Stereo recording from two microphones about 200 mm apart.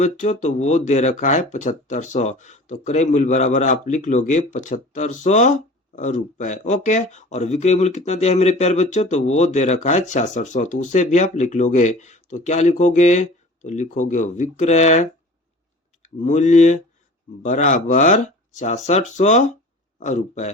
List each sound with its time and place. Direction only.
0.0 s speech: 35° left (ahead or behind)
16.2 s speech: 35° left (ahead or behind)